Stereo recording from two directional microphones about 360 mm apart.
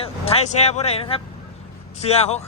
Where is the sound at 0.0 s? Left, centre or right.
Centre.